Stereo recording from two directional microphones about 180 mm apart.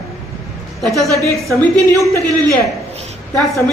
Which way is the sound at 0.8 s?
Centre (ahead or behind).